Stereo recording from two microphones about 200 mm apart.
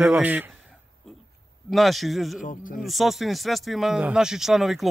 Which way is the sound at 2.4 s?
40° left (ahead or behind).